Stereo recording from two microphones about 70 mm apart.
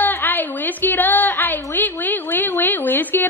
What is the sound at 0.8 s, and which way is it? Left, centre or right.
A woman's voice, left.